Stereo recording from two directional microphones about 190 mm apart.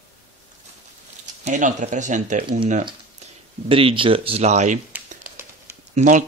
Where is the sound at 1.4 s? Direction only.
40° right (ahead or behind).